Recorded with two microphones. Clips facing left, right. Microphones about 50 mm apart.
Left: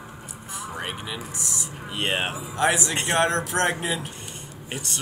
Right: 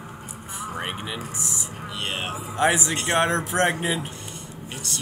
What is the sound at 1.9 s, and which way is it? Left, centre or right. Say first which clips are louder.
Speech: left 4 dB; left.